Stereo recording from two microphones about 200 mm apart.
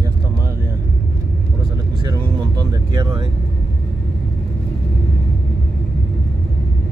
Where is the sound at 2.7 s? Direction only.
20° right (ahead or behind).